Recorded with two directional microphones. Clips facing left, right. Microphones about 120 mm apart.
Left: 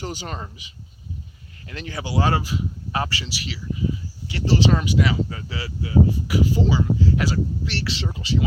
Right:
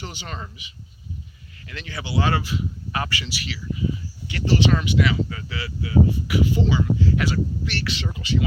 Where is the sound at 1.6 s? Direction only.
40° left (ahead or behind).